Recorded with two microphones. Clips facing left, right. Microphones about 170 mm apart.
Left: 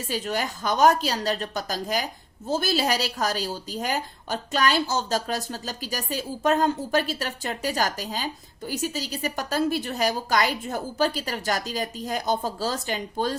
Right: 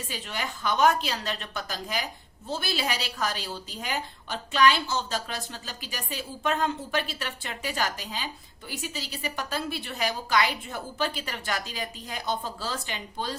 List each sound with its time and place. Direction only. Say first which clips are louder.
0.1 s a woman's voice: left 9 dB; 40° left (ahead or behind)